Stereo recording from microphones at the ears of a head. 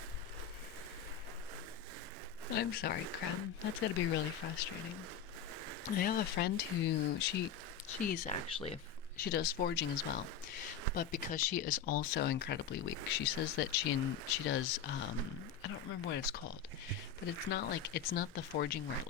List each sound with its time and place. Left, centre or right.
2.5 s speech: left
17.5 s speech: left